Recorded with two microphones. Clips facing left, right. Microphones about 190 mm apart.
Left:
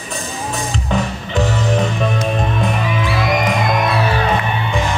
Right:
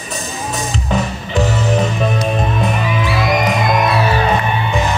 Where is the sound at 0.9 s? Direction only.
5° right (ahead or behind).